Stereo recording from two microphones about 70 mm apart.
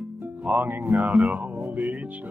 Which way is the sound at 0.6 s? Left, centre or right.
Right.